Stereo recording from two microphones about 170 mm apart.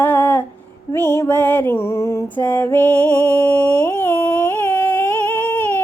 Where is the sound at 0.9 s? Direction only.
15° left (ahead or behind).